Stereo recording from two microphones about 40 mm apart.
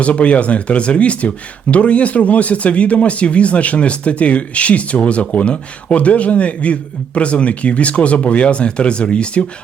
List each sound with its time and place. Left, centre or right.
0.0 s a man's voice: left